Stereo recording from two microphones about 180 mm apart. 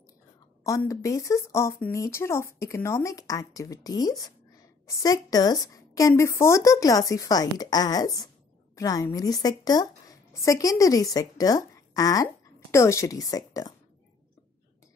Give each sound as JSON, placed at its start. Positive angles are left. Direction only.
{"t": 0.7, "sound": "a woman's voice", "side_deg": 15}